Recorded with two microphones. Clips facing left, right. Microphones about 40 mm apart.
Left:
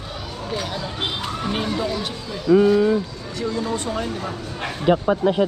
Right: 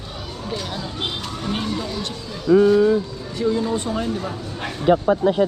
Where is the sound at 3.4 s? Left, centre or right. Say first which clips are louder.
Right 4 dB; centre.